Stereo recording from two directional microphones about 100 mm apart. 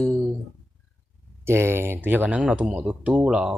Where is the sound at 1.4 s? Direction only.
25° right (ahead or behind).